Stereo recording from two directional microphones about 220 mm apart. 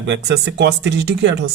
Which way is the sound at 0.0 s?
50° right (ahead or behind).